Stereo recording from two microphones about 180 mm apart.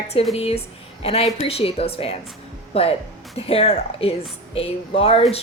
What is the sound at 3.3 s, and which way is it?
A woman's voice, 35° left (ahead or behind).